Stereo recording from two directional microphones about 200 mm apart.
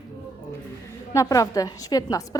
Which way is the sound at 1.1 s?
15° left (ahead or behind).